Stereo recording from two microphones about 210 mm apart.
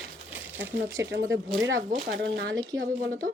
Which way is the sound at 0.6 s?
60° right (ahead or behind).